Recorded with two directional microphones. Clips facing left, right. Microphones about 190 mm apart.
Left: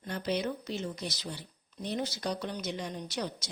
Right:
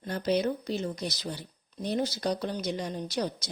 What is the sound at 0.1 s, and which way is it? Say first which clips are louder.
Speech: right 5 dB; 40° right (ahead or behind).